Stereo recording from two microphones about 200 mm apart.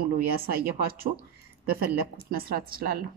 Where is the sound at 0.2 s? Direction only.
50° right (ahead or behind).